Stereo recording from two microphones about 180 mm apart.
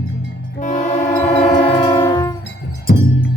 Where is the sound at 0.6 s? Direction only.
45° left (ahead or behind).